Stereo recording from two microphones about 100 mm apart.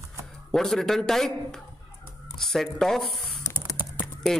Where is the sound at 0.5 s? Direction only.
5° left (ahead or behind).